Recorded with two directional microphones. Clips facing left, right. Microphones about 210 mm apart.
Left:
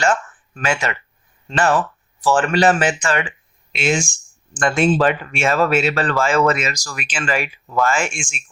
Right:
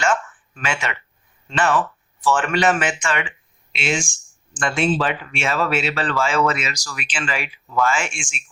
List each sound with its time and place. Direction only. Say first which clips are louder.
0.0 s speech: left 2 dB; 40° left (ahead or behind)